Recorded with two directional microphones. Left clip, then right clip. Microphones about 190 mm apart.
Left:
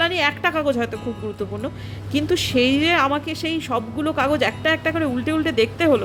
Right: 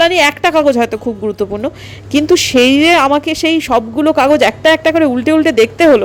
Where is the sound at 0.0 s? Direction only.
30° right (ahead or behind).